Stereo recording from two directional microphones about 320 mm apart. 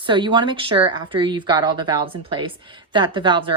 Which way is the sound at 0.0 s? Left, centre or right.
Centre.